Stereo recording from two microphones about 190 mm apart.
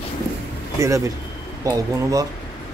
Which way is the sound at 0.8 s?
15° right (ahead or behind).